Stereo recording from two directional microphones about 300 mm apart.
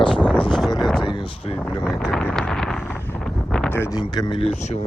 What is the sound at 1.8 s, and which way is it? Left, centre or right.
Wind noise, centre.